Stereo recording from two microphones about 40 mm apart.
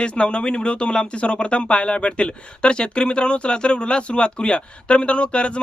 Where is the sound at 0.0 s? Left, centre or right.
Left.